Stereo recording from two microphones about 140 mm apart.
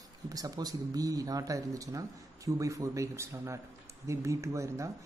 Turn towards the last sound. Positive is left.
turn(degrees=-20)  # may be behind; listen again after turning